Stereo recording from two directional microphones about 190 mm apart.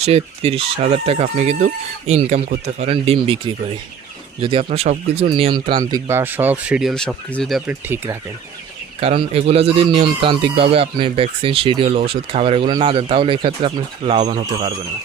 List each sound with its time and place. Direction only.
0.0 s speech: 30° right (ahead or behind); by 7.6 s 5° left (ahead or behind)
7.7 s speech: 10° right (ahead or behind)
9.3 s speech: 30° right (ahead or behind)